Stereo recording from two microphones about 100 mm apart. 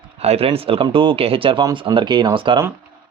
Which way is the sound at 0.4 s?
70° right (ahead or behind).